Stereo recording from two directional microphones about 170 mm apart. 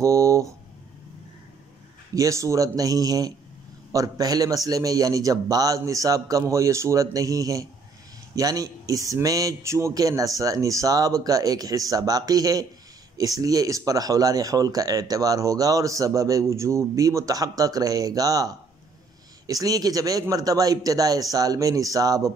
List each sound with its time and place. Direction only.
0.0 s speech: 20° right (ahead or behind)
2.1 s speech: 20° right (ahead or behind)